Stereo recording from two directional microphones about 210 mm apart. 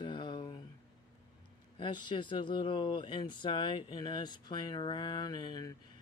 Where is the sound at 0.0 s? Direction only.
20° left (ahead or behind).